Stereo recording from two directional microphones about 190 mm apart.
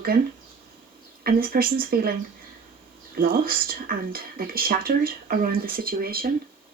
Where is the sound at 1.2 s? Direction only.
50° right (ahead or behind).